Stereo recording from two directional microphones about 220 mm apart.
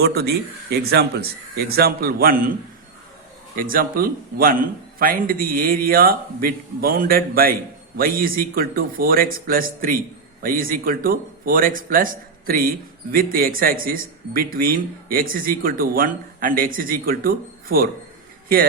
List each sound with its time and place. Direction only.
0.0 s speech: 45° right (ahead or behind)
3.5 s speech: 40° right (ahead or behind)